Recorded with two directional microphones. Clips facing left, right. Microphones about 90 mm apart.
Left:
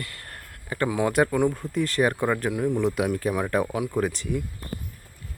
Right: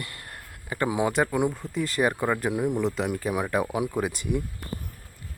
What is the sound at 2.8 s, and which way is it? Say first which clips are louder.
Speech: left 3 dB; 5° left (ahead or behind).